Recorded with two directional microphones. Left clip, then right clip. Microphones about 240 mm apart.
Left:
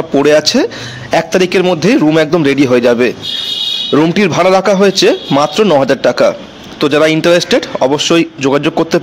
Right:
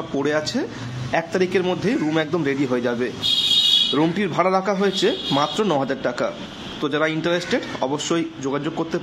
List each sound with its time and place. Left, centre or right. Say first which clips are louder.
0.2 s a man's voice: left 14 dB; left